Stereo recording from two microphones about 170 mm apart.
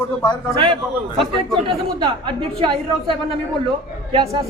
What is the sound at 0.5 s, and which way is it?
Speech, 30° right (ahead or behind).